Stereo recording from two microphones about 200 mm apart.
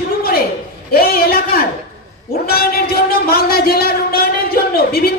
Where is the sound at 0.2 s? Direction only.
50° left (ahead or behind).